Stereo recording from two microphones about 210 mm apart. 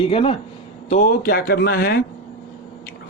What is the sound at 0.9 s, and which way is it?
Speech, 40° left (ahead or behind).